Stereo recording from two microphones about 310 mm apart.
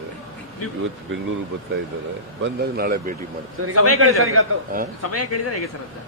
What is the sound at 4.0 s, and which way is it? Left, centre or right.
Speech, right.